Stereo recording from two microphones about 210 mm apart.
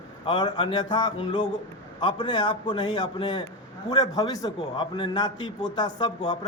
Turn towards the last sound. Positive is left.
turn(degrees=20)  # may be behind; listen again after turning